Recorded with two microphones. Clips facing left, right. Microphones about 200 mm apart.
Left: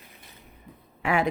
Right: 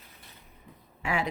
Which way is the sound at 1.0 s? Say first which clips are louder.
Left 5 dB; 55° left (ahead or behind).